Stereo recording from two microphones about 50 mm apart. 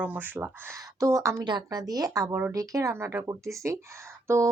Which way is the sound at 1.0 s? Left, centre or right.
Right.